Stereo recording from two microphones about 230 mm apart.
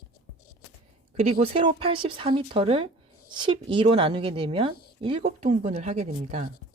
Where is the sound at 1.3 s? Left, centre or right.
Right.